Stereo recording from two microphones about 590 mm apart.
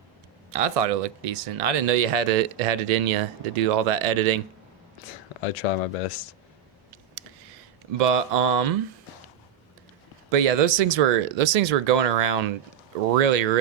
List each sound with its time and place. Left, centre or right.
0.5 s speech: right
5.4 s speech: left
7.9 s speech: right
10.3 s speech: right